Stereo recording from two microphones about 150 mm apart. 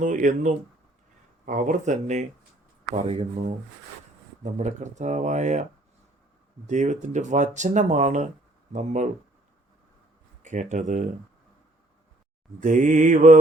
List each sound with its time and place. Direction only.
0.0 s mantra: 55° right (ahead or behind)
1.5 s speech: 60° right (ahead or behind)
4.5 s speech: 50° right (ahead or behind)
6.7 s speech: 50° right (ahead or behind)
10.4 s mantra: 55° right (ahead or behind)
12.5 s mantra: 60° right (ahead or behind)